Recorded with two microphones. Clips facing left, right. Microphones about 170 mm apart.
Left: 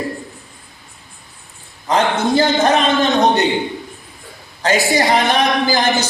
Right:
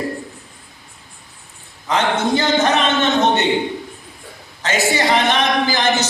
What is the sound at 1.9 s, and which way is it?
A man's voice, 35° left (ahead or behind).